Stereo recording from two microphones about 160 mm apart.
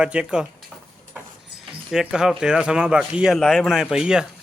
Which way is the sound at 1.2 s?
10° right (ahead or behind).